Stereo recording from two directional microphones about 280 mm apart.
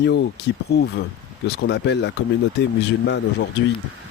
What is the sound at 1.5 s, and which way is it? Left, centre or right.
Speech, left.